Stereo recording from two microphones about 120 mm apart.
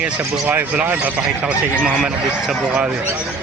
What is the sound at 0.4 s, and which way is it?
Speech, 10° right (ahead or behind).